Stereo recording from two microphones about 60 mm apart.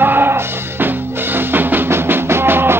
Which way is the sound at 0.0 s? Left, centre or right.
Right.